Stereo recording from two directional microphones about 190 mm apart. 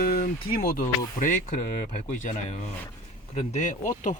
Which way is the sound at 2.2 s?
40° left (ahead or behind).